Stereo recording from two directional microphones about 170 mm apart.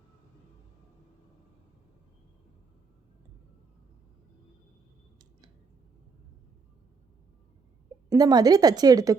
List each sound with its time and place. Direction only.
8.1 s a woman's voice: 25° right (ahead or behind)